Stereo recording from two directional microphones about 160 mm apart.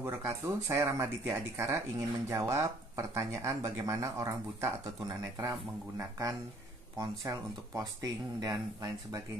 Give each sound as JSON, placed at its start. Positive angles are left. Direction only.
{"t": 0.5, "sound": "speech", "side_deg": -15}